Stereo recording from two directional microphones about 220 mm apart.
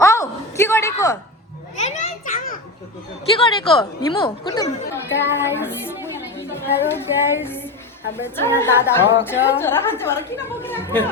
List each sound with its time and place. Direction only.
0.0 s a sound: 15° left (ahead or behind)
1.7 s children playing: 30° left (ahead or behind)
3.3 s a woman's voice: 25° left (ahead or behind)
6.3 s music: 10° left (ahead or behind)
8.2 s a woman's voice: 10° left (ahead or behind)